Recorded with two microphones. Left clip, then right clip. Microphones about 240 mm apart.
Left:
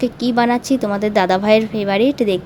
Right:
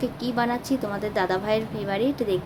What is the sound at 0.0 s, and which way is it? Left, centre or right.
A woman's voice, left.